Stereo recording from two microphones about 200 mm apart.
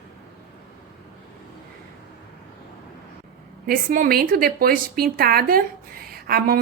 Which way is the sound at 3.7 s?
45° right (ahead or behind).